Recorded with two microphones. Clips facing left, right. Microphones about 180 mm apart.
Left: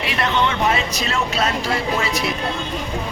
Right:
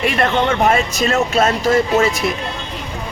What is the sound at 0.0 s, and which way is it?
Speech, 50° right (ahead or behind).